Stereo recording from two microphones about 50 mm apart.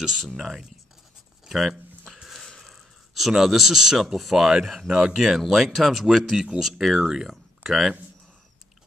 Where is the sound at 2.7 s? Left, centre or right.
Centre.